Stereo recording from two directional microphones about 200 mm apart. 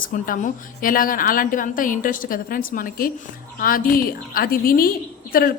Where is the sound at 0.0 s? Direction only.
45° left (ahead or behind).